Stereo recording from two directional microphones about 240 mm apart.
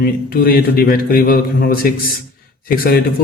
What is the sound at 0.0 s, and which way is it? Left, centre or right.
A man's voice, left.